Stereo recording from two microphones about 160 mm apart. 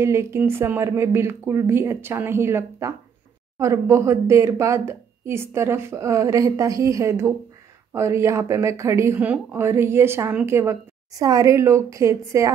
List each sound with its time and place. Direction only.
0.0 s speech: 15° right (ahead or behind)